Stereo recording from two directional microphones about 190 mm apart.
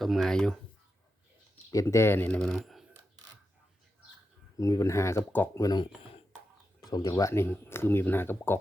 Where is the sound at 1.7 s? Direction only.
15° left (ahead or behind).